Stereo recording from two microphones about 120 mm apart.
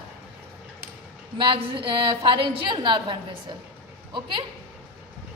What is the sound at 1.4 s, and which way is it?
A woman's voice, 45° right (ahead or behind).